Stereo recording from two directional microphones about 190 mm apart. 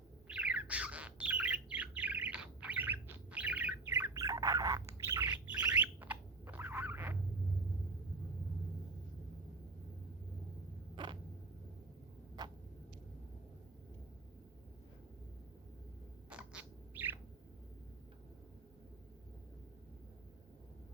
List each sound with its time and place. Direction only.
0.3 s bird: 5° right (ahead or behind)
10.9 s creak: 25° right (ahead or behind)
12.4 s a sound: 20° right (ahead or behind)
16.3 s bird: 5° right (ahead or behind)